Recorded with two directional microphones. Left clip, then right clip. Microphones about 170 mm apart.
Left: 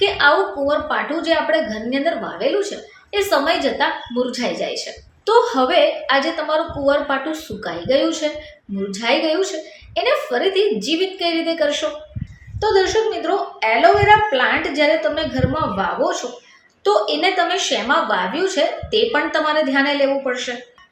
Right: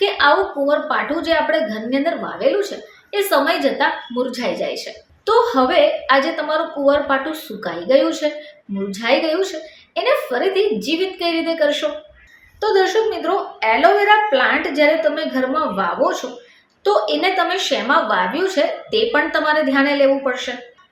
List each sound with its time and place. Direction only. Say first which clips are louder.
0.0 s a woman's voice: even; 5° right (ahead or behind)